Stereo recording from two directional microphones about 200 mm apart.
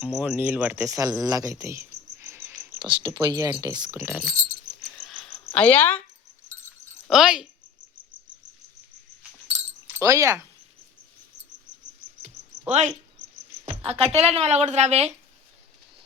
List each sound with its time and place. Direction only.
0.0 s speech: 5° right (ahead or behind)
2.7 s a sound: 25° right (ahead or behind)
3.2 s speech: 20° right (ahead or behind)
4.9 s cricket: centre (ahead or behind)
5.5 s speech: 5° left (ahead or behind)
7.1 s speech: 5° right (ahead or behind)
9.9 s speech: 15° right (ahead or behind)
12.6 s speech: 35° right (ahead or behind)